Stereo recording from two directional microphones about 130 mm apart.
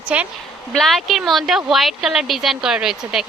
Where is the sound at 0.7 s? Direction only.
Centre (ahead or behind).